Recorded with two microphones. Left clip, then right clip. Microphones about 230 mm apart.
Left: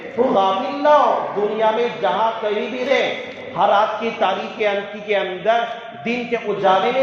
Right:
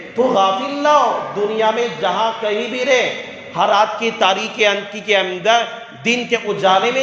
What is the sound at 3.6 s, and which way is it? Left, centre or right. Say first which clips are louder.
A man's voice: right 2 dB; right.